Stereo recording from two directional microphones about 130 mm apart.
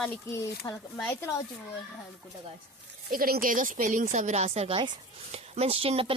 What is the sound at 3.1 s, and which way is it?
A woman's voice, 90° right.